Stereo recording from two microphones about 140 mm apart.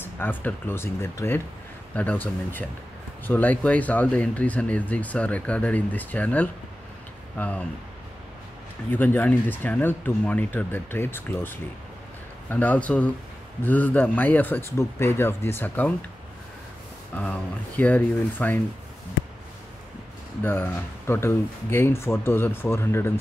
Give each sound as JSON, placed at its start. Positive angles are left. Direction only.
{"t": 0.0, "sound": "speech", "side_deg": 15}
{"t": 8.9, "sound": "speech", "side_deg": 10}
{"t": 17.2, "sound": "speech", "side_deg": 10}
{"t": 20.4, "sound": "speech", "side_deg": 15}